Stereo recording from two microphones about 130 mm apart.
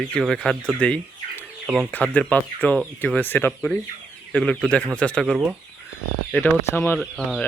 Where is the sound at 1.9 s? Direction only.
10° left (ahead or behind).